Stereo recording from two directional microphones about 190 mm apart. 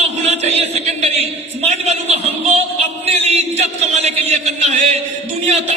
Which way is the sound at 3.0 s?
35° right (ahead or behind).